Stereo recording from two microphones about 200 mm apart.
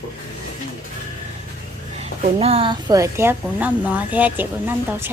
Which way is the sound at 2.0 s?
30° right (ahead or behind).